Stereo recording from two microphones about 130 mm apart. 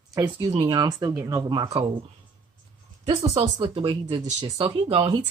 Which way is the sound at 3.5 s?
45° right (ahead or behind).